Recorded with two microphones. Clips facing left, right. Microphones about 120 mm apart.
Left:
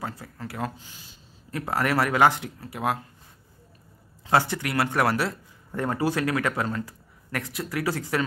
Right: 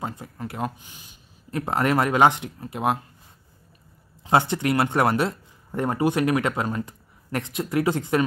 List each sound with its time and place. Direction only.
0.0 s speech: 20° right (ahead or behind)
4.3 s speech: 25° right (ahead or behind)